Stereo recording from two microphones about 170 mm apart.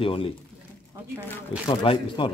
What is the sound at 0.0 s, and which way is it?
Speech, 30° left (ahead or behind).